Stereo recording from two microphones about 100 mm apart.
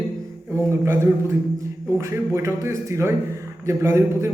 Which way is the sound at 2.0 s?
30° right (ahead or behind).